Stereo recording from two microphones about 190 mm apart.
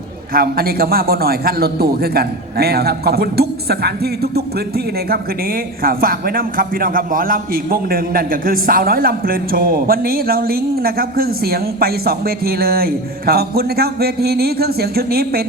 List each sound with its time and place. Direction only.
0.3 s a man's voice: 50° right (ahead or behind)